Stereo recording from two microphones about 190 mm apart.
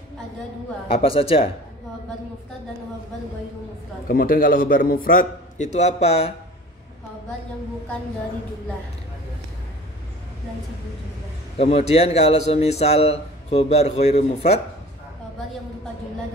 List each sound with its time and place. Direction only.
0.8 s a man's voice: 30° left (ahead or behind)
4.1 s a man's voice: 45° left (ahead or behind)
11.5 s a man's voice: 35° left (ahead or behind)